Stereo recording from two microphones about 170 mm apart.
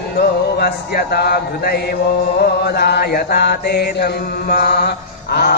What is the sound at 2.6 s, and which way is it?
Mantra, 70° left (ahead or behind).